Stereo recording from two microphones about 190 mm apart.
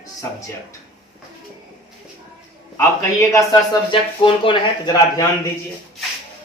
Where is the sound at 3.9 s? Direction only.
25° left (ahead or behind).